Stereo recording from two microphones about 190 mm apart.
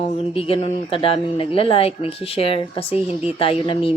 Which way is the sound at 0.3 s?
30° left (ahead or behind).